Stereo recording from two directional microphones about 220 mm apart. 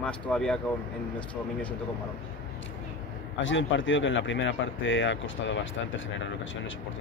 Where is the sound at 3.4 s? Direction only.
60° left (ahead or behind).